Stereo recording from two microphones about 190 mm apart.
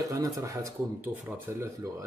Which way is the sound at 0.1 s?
15° right (ahead or behind).